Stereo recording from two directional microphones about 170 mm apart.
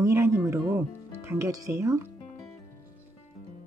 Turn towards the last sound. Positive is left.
turn(degrees=-15)  # may be behind; listen again after turning